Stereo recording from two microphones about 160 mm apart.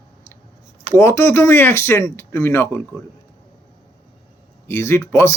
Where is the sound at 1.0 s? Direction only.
15° left (ahead or behind).